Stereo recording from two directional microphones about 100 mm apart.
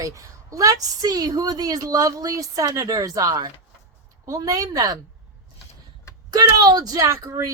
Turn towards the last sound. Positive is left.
turn(degrees=-35)  # may be behind; listen again after turning